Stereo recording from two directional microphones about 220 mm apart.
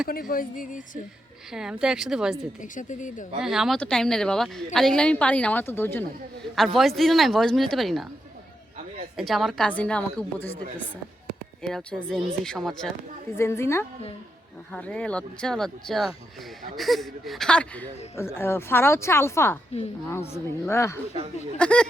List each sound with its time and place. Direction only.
0.1 s speech: 40° left (ahead or behind)
1.5 s speech: 5° right (ahead or behind)
2.6 s speech: 35° left (ahead or behind)
3.3 s speech: centre (ahead or behind)
9.1 s speech: centre (ahead or behind)